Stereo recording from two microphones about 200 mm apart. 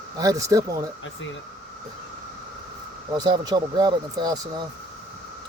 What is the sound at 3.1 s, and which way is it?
Speech, 20° right (ahead or behind).